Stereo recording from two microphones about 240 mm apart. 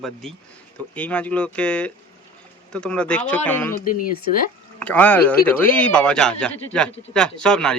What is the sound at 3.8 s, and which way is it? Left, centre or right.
Speech, left.